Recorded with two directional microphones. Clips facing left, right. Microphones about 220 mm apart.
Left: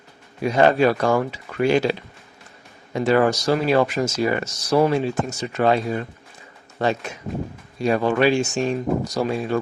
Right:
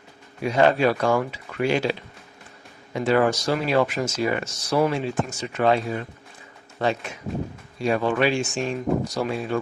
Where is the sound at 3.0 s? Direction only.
40° left (ahead or behind).